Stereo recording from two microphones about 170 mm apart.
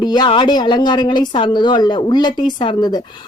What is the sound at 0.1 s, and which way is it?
Speech, 25° left (ahead or behind).